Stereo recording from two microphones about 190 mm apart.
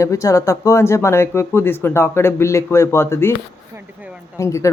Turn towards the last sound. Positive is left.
turn(degrees=15)  # may be behind; listen again after turning